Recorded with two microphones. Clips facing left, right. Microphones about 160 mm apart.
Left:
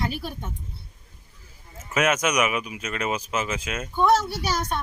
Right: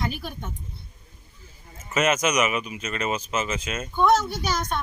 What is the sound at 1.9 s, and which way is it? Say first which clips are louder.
Speech: even; 5° left (ahead or behind).